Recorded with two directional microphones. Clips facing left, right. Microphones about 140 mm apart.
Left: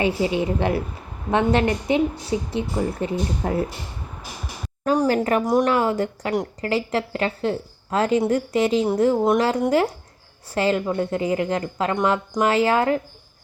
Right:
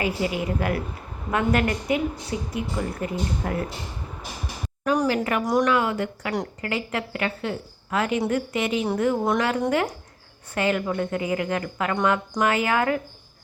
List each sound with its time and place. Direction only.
0.0 s a woman's voice: 25° left (ahead or behind)
5.0 s a woman's voice: 35° left (ahead or behind)